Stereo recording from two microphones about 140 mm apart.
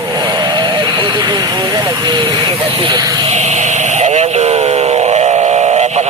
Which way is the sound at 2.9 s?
25° right (ahead or behind).